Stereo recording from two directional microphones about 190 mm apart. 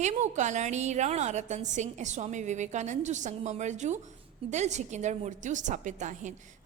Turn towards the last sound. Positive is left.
turn(degrees=-40)  # may be behind; listen again after turning